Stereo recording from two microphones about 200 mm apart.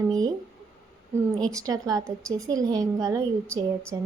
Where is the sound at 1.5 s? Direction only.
15° right (ahead or behind).